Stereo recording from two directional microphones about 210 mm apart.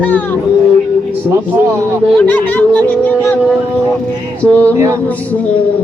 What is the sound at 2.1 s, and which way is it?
Speech, 10° left (ahead or behind).